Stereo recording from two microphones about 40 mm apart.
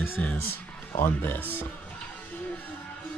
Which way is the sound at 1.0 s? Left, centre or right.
Left.